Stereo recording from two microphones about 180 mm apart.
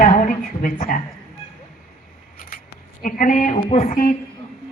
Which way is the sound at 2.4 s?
50° left (ahead or behind).